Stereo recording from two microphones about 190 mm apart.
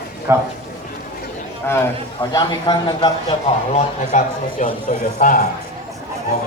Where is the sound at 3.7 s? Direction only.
40° left (ahead or behind).